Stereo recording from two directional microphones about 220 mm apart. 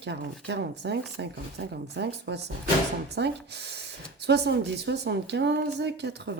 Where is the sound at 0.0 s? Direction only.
50° right (ahead or behind).